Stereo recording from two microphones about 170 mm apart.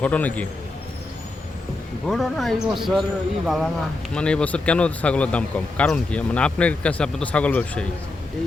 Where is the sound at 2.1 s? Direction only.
Centre (ahead or behind).